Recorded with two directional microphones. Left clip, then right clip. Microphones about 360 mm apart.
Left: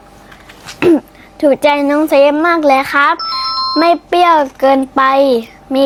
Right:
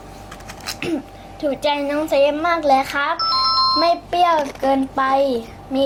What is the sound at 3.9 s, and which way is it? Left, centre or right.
A child's voice, left.